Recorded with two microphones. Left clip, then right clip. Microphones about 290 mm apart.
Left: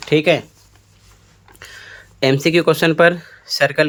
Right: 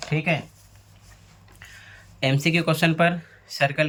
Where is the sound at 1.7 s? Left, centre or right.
Centre.